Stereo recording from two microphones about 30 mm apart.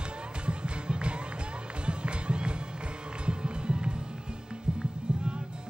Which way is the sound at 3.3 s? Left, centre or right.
Right.